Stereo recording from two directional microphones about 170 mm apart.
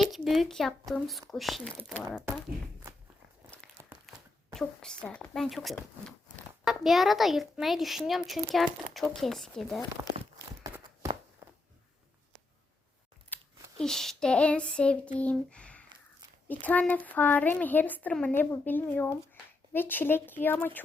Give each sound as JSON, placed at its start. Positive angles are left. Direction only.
{"t": 0.1, "sound": "speech", "side_deg": 0}
{"t": 3.8, "sound": "a sound", "side_deg": -15}
{"t": 4.5, "sound": "speech", "side_deg": 5}
{"t": 10.0, "sound": "walk", "side_deg": -20}
{"t": 13.3, "sound": "speech", "side_deg": 5}